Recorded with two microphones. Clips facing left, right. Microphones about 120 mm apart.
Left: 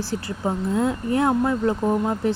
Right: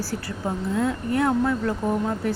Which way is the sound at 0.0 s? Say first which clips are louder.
Left 3 dB; 25° left (ahead or behind).